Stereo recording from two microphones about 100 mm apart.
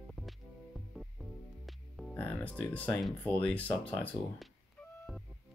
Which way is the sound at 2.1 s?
15° left (ahead or behind).